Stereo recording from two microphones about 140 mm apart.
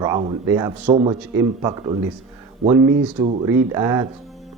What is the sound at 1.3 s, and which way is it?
A man's voice, 30° right (ahead or behind).